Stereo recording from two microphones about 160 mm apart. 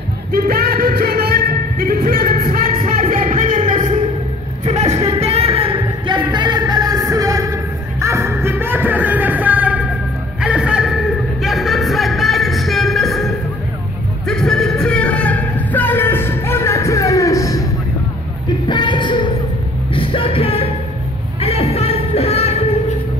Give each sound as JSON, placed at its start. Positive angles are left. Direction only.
{"t": 0.3, "sound": "music", "side_deg": -75}
{"t": 3.0, "sound": "music", "side_deg": -55}
{"t": 4.6, "sound": "a sound", "side_deg": -45}
{"t": 5.1, "sound": "music", "side_deg": -40}
{"t": 18.7, "sound": "music", "side_deg": 30}
{"t": 21.4, "sound": "a sound", "side_deg": 40}